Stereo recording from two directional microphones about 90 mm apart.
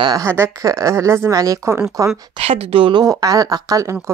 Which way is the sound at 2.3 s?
90° right.